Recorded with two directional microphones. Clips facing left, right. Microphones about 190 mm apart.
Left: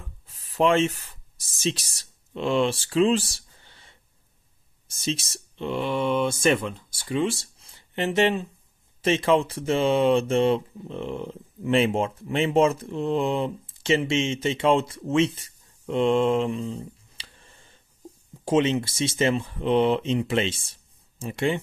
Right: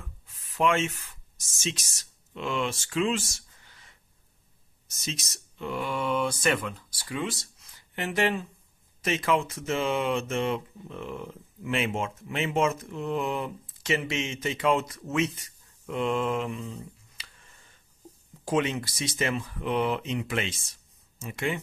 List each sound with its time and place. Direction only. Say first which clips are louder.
0.3 s speech: left 4 dB; 35° left (ahead or behind)